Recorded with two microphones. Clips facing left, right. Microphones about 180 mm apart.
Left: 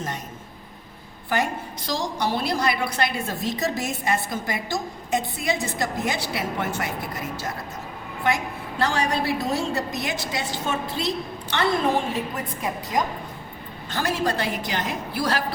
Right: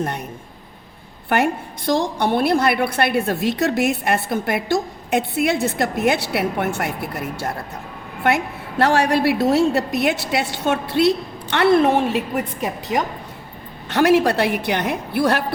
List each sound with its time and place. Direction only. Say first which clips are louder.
1.9 s a woman's voice: right 7 dB; 55° right (ahead or behind)
8.8 s a woman's voice: right 7 dB; 65° right (ahead or behind)